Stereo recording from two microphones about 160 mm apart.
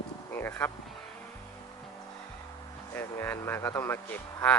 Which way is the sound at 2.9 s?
15° left (ahead or behind).